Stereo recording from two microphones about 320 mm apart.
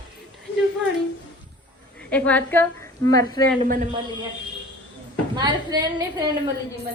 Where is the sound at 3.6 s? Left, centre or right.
Centre.